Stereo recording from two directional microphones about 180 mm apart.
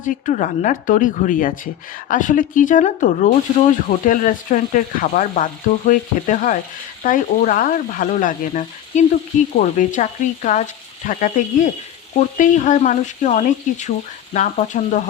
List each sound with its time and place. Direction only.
0.0 s speech: 45° left (ahead or behind)